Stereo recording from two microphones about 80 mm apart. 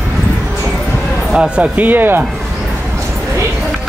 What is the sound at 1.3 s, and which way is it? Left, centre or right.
Speech, centre.